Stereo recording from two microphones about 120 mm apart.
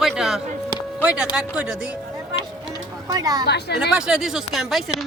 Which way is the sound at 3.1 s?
30° right (ahead or behind).